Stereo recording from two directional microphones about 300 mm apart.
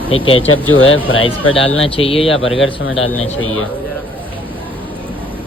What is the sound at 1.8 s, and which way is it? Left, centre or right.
Speech, centre.